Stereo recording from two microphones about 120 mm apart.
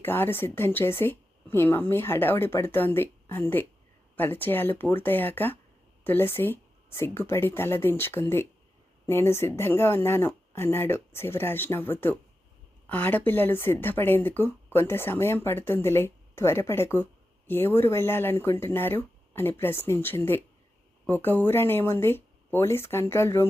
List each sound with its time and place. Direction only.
0.0 s speech: 20° left (ahead or behind)